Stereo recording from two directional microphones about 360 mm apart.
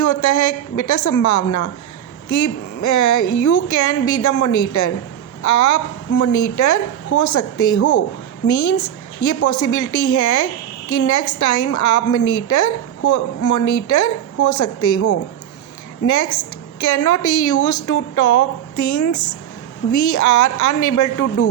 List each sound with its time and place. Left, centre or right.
0.0 s a woman's voice: left